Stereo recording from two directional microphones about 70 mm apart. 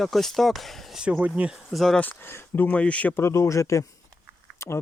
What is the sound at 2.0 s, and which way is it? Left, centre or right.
Speech, left.